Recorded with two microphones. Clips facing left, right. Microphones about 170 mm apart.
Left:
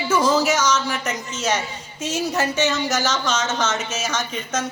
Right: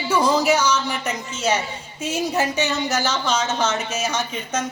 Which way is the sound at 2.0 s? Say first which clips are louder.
Even; 15° right (ahead or behind).